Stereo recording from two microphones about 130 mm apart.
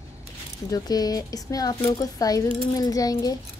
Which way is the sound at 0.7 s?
30° left (ahead or behind).